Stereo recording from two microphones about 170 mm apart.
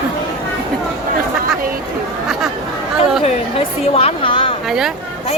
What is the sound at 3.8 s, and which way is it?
Speech, 35° left (ahead or behind).